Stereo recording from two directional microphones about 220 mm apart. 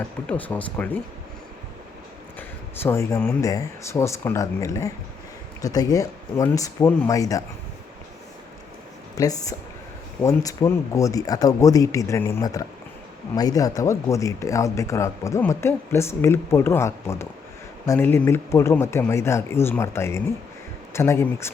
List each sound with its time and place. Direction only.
0.3 s speech: 5° left (ahead or behind)
2.8 s speech: 10° left (ahead or behind)
9.1 s speech: 15° left (ahead or behind)